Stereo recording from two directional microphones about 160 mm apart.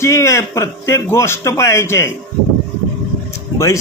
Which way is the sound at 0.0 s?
20° left (ahead or behind).